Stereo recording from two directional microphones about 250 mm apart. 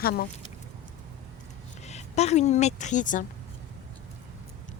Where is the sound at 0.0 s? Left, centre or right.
Left.